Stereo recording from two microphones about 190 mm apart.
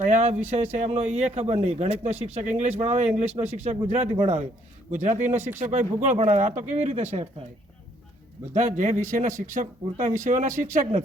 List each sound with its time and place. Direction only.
0.1 s a man's voice: 35° right (ahead or behind)
8.5 s a man's voice: 40° right (ahead or behind)